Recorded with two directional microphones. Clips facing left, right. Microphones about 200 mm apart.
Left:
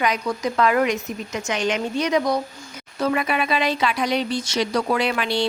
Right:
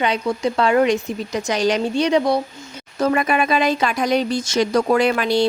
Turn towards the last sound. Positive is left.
turn(degrees=-45)  # may be behind; listen again after turning